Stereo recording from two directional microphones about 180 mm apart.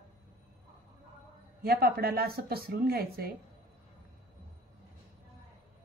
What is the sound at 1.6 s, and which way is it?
A woman's voice, 60° right (ahead or behind).